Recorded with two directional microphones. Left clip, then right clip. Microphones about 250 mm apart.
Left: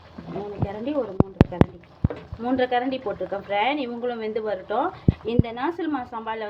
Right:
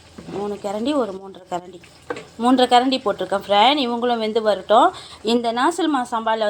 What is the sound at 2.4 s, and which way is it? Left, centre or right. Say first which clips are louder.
A woman's voice: right 8 dB; right.